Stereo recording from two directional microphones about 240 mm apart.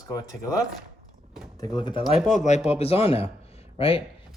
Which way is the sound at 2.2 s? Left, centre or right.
Left.